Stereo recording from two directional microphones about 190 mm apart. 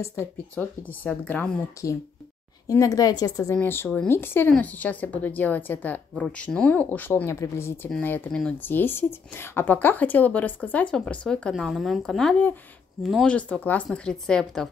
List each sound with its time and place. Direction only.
0.0 s speech: 15° left (ahead or behind)